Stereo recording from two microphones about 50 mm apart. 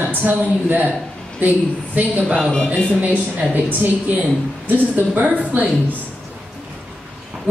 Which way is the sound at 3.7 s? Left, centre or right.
Right.